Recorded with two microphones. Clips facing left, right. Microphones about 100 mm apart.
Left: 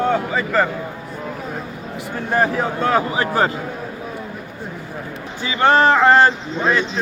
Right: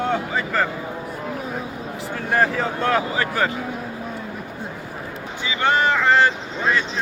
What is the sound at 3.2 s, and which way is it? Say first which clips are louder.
Speech: left 4 dB; 30° left (ahead or behind).